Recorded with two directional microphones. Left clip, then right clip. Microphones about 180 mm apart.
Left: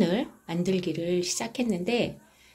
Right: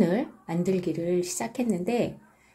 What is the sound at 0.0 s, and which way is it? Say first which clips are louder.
Speech: right 1 dB; 5° right (ahead or behind).